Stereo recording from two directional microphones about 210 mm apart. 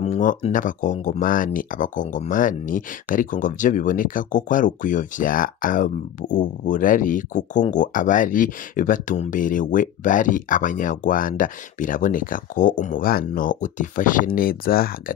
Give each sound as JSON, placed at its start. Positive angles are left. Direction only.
{"t": 0.0, "sound": "speech", "side_deg": 35}